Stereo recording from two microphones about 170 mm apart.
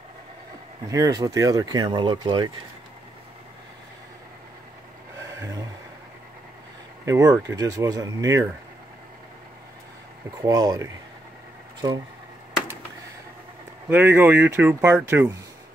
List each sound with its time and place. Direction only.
0.8 s speech: 20° right (ahead or behind)
5.3 s vehicle: 20° right (ahead or behind)
7.1 s speech: 20° right (ahead or behind)
10.4 s speech: 25° right (ahead or behind)
13.8 s speech: 10° right (ahead or behind)